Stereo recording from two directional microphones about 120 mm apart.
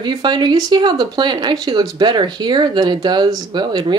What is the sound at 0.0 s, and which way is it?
Speech, 40° right (ahead or behind).